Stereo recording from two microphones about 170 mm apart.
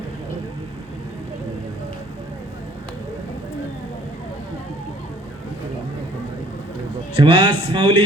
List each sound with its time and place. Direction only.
7.2 s speech: 30° right (ahead or behind)